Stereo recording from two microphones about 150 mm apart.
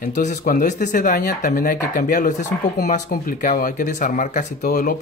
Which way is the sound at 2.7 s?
80° left.